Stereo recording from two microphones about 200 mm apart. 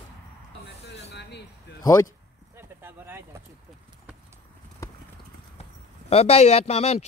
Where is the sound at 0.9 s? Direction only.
60° left (ahead or behind).